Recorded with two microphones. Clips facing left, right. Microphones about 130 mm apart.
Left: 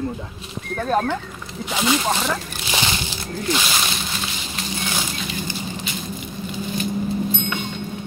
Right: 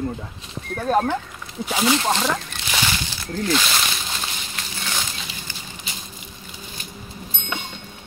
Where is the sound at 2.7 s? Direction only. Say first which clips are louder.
Left 1 dB; 20° left (ahead or behind).